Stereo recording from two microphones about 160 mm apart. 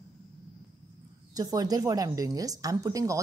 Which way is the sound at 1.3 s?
25° right (ahead or behind).